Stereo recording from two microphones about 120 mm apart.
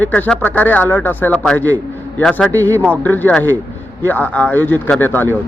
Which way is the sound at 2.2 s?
5° left (ahead or behind).